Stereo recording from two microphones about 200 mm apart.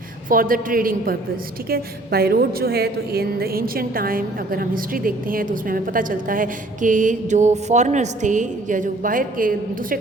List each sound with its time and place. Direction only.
0.3 s a woman's voice: 45° right (ahead or behind)